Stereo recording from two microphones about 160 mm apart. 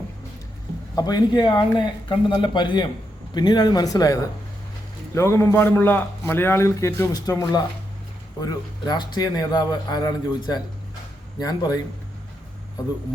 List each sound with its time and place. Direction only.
0.9 s a man's voice: 25° left (ahead or behind)